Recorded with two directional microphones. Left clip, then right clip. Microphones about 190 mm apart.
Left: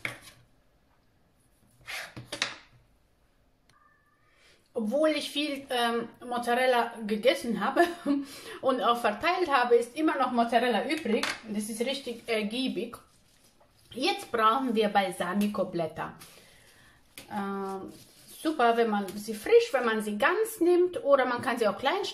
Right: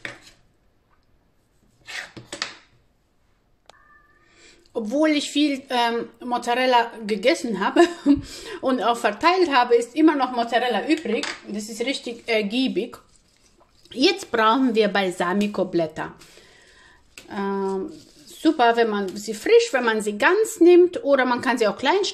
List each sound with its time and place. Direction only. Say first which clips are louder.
4.8 s speech: right 5 dB; 45° right (ahead or behind)
13.8 s a woman's voice: right 9 dB; 45° right (ahead or behind)
17.3 s a woman's voice: right 8 dB; 45° right (ahead or behind)